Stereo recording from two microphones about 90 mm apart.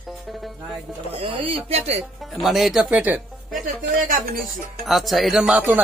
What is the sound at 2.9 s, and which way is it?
Speech, 15° right (ahead or behind).